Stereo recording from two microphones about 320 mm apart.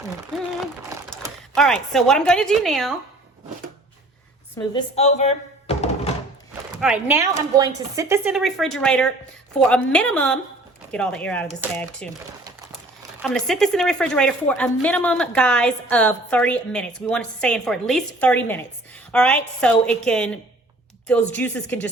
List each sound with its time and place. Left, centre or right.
0.3 s a sound: centre
4.5 s speech: centre
6.7 s speech: centre